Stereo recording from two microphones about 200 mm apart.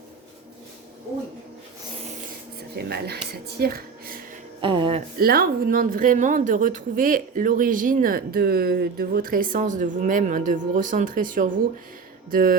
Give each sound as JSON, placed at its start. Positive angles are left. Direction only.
{"t": 2.7, "sound": "speech", "side_deg": -55}
{"t": 4.6, "sound": "a sound", "side_deg": -25}
{"t": 5.1, "sound": "speech", "side_deg": -50}